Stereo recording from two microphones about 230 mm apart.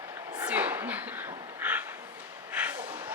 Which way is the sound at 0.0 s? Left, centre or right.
Centre.